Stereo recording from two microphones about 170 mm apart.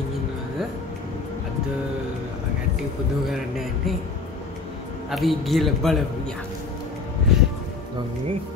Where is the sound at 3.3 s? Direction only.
Centre (ahead or behind).